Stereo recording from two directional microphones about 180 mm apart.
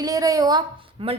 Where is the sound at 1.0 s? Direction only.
30° right (ahead or behind).